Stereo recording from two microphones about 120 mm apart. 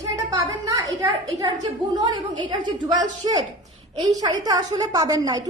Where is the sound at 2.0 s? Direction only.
40° right (ahead or behind).